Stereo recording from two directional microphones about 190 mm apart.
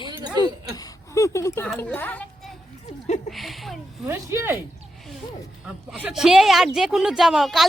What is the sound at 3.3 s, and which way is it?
Speech, centre (ahead or behind).